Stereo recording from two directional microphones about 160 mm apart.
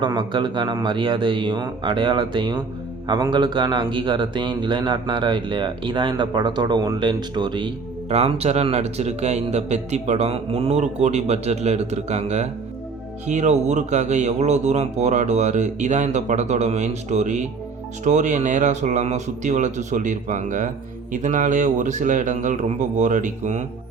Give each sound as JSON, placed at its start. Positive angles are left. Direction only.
{"t": 0.0, "sound": "a man's voice", "side_deg": -25}
{"t": 8.1, "sound": "a man's voice", "side_deg": -40}